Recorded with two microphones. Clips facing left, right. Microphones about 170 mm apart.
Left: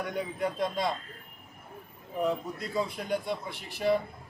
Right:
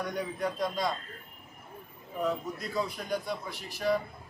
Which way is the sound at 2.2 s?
25° left (ahead or behind).